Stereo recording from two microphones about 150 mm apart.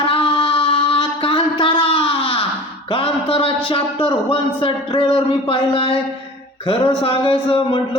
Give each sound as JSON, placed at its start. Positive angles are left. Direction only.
{"t": 0.0, "sound": "carnatic music", "side_deg": 35}
{"t": 0.3, "sound": "a sound", "side_deg": 35}
{"t": 2.9, "sound": "a man's voice", "side_deg": 35}